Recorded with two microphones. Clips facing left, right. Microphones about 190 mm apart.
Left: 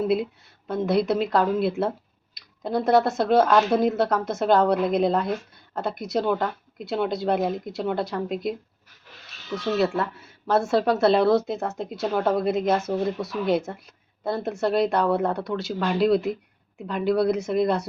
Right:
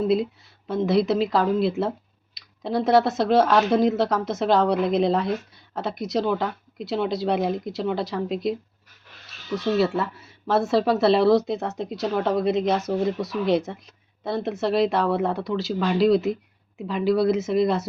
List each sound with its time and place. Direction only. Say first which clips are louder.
0.7 s speech: right 1 dB; centre (ahead or behind)
10.0 s speech: even; centre (ahead or behind)